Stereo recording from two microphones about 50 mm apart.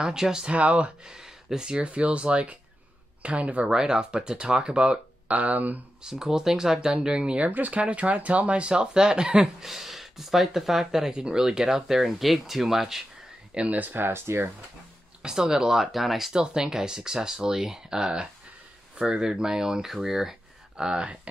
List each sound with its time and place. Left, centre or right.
0.0 s speech: centre
0.5 s speech: right
1.0 s speech: centre; by 3.6 s right
3.6 s speech: centre; by 5.8 s right
6.0 s speech: centre
9.7 s speech: centre
13.6 s speech: right
15.2 s speech: centre